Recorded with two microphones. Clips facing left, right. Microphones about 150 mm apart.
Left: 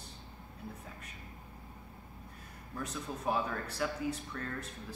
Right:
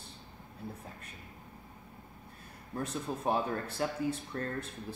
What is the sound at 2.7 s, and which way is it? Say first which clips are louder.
Speech: right 4 dB; 30° right (ahead or behind).